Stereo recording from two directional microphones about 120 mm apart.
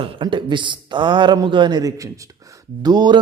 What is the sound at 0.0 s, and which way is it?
A man's voice, 40° right (ahead or behind).